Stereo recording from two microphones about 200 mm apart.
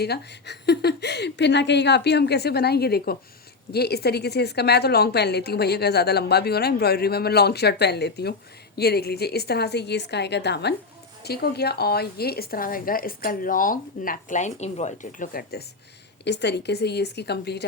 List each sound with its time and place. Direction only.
0.0 s a woman's voice: 55° left (ahead or behind)
16.2 s a woman's voice: 60° left (ahead or behind)